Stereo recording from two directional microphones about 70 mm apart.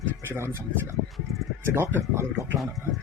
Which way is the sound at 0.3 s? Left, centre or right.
Right.